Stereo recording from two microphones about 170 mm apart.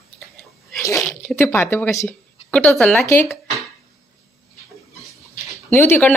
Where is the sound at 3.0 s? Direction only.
15° left (ahead or behind).